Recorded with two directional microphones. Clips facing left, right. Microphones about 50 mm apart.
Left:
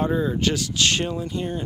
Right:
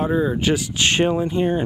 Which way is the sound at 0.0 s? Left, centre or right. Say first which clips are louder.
Right 2 dB; centre.